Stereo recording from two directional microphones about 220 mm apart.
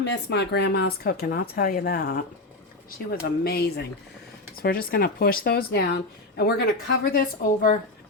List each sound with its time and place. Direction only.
0.0 s speech: 50° left (ahead or behind)